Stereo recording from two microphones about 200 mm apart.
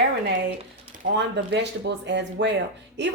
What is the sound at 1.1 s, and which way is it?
A woman's voice, 60° right (ahead or behind).